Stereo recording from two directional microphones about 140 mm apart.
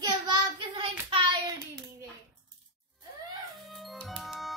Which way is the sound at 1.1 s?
40° right (ahead or behind).